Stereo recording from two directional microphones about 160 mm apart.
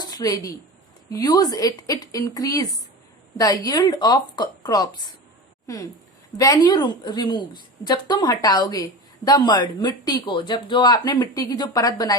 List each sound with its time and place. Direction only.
0.0 s a woman's voice: 25° left (ahead or behind)